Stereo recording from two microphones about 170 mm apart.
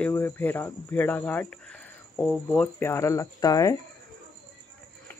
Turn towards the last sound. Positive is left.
turn(degrees=20)  # may be behind; listen again after turning